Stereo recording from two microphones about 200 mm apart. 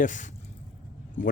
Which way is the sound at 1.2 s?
40° left (ahead or behind).